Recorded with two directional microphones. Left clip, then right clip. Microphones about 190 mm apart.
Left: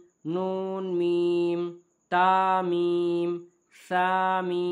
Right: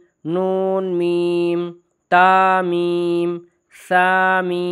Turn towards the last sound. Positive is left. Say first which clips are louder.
# right 9 dB
turn(degrees=-40)  # may be behind; listen again after turning